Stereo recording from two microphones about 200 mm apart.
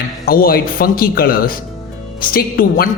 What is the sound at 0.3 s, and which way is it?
A woman's voice, 50° left (ahead or behind).